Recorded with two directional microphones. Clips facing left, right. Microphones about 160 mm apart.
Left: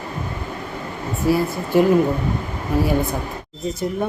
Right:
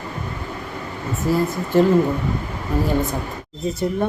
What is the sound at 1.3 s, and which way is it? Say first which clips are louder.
A man's voice: left 1 dB; 10° left (ahead or behind).